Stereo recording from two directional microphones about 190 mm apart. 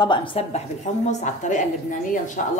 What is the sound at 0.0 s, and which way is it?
A woman's voice, 25° left (ahead or behind).